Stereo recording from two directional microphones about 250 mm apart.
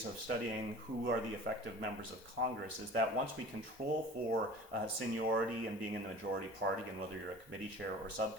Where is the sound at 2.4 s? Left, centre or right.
Right.